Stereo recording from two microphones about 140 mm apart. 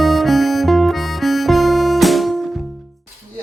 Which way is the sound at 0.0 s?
Centre (ahead or behind).